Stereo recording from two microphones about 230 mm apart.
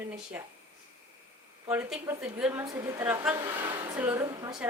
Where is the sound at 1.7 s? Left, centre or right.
Centre.